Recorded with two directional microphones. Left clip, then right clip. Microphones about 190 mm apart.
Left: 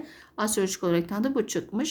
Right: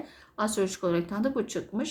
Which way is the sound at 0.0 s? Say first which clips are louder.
Left 1 dB; 45° left (ahead or behind).